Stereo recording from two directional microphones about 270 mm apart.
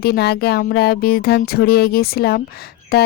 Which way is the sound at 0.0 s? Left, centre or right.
Left.